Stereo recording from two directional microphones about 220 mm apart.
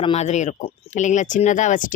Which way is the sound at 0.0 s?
30° left (ahead or behind).